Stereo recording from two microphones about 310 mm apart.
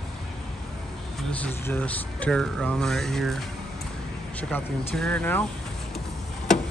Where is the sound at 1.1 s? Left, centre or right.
Centre.